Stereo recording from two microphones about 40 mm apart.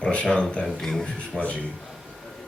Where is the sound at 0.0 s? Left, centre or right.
Left.